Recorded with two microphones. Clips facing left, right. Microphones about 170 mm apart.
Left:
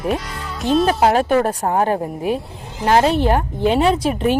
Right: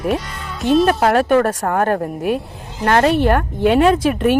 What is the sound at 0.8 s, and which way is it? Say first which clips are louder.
Speech: right 1 dB; 60° right (ahead or behind).